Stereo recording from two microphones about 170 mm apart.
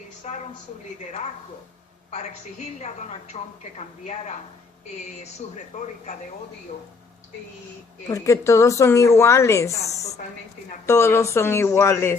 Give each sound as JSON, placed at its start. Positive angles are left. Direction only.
{"t": 0.2, "sound": "a woman's voice", "side_deg": 40}
{"t": 2.8, "sound": "a woman's voice", "side_deg": 40}
{"t": 5.7, "sound": "speech", "side_deg": 45}
{"t": 8.0, "sound": "a woman's voice", "side_deg": 20}
{"t": 10.8, "sound": "a woman's voice", "side_deg": 15}